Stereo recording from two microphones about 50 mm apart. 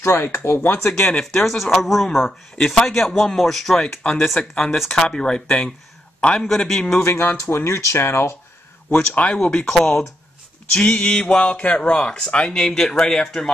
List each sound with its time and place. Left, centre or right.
0.0 s speech: left
0.8 s speech: left
1.2 s a man's voice: centre
3.8 s a man's voice: centre
4.6 s speech: centre
5.0 s a man's voice: centre
7.0 s speech: left
7.6 s speech: left
9.1 s speech: left
9.7 s a man's voice: centre
10.8 s speech: left